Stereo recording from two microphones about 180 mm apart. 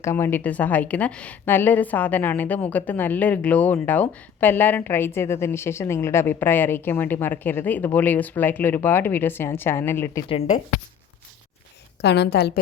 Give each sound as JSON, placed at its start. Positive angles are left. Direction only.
{"t": 0.0, "sound": "a woman's voice", "side_deg": 15}
{"t": 10.2, "sound": "a woman's voice", "side_deg": 35}
{"t": 12.0, "sound": "a woman's voice", "side_deg": 70}